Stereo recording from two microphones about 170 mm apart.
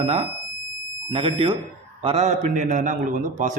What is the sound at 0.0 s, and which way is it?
A man's voice, 35° right (ahead or behind).